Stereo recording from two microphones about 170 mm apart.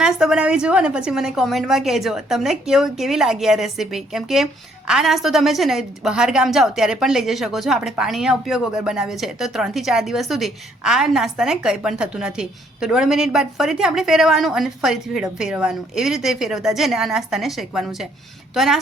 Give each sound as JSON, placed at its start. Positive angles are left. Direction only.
{"t": 0.0, "sound": "a woman's voice", "side_deg": -5}